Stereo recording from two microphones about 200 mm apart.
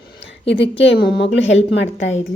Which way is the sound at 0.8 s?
55° left (ahead or behind).